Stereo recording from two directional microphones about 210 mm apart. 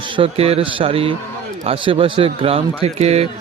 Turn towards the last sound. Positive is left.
turn(degrees=-30)  # may be behind; listen again after turning